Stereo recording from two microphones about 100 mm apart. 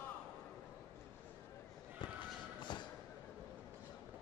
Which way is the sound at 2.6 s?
50° left (ahead or behind).